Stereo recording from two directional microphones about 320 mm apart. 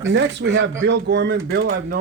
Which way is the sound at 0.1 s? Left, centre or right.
Right.